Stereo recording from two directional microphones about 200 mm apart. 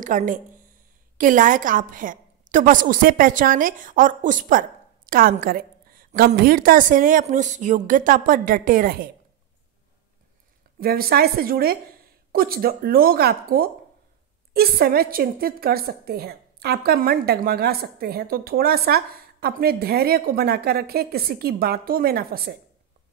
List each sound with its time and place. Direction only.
0.0 s a woman's voice: 40° right (ahead or behind)
10.8 s a woman's voice: 50° right (ahead or behind)